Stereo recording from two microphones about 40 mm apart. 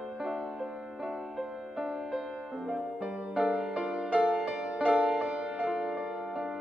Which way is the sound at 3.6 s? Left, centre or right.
Centre.